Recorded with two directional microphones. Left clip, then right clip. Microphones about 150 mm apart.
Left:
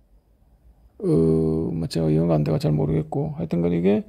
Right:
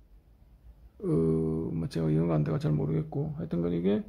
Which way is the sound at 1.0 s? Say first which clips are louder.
Left 8 dB; 35° left (ahead or behind).